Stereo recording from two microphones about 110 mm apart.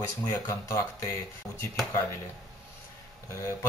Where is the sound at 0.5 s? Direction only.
25° left (ahead or behind).